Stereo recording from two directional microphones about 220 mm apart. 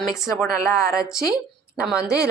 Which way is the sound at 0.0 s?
Centre (ahead or behind).